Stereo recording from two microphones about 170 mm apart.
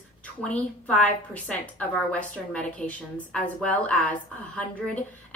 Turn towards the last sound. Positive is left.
turn(degrees=10)  # may be behind; listen again after turning